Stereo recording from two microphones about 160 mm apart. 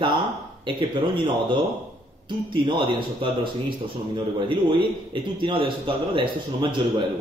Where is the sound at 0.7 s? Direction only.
30° right (ahead or behind).